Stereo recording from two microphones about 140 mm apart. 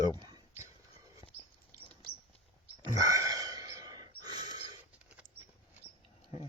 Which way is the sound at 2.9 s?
25° right (ahead or behind).